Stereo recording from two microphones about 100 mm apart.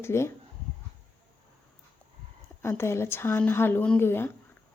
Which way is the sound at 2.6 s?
25° left (ahead or behind).